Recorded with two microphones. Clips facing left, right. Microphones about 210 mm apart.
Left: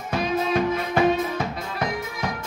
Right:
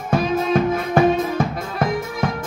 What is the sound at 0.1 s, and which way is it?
Music, 50° right (ahead or behind).